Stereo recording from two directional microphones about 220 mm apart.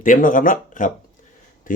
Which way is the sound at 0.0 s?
40° left (ahead or behind).